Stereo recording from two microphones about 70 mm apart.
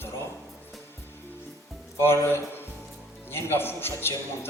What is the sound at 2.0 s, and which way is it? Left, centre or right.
A man's voice, left.